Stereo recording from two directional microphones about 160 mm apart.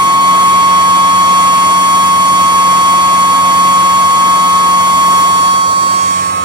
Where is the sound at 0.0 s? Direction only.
30° right (ahead or behind).